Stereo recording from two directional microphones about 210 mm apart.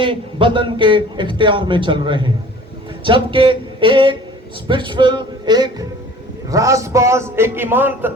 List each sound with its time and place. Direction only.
0.0 s a man's voice: 25° right (ahead or behind)